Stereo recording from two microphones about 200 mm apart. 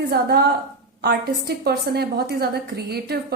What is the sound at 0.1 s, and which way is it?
A woman's voice, 50° right (ahead or behind).